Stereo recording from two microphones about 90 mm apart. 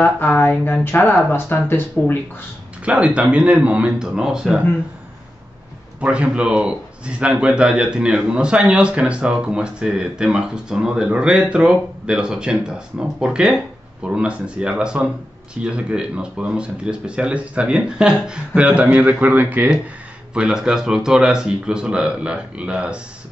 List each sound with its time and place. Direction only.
0.0 s speech: 20° left (ahead or behind)
2.8 s a man's voice: 15° right (ahead or behind)
5.9 s a man's voice: 10° right (ahead or behind)